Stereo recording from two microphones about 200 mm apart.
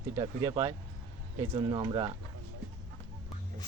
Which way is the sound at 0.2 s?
25° right (ahead or behind).